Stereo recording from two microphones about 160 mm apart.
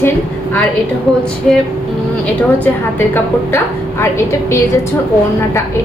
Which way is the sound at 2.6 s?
15° left (ahead or behind).